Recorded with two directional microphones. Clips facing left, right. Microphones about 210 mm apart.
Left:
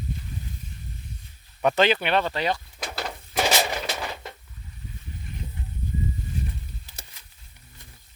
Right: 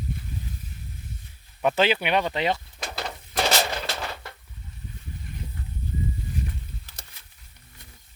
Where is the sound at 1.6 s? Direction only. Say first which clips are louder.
Left 1 dB; 5° right (ahead or behind); by 2.6 s 20° right (ahead or behind).